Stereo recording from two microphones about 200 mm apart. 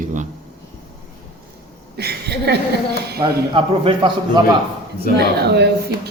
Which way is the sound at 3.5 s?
25° right (ahead or behind).